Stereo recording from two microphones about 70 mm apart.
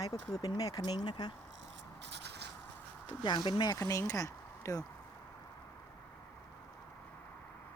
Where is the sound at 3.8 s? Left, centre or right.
Left.